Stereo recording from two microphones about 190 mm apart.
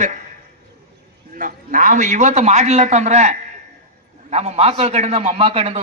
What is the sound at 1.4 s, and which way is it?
A man's voice, 45° right (ahead or behind).